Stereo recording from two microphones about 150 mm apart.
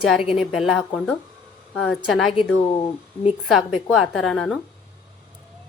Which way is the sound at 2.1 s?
Centre (ahead or behind).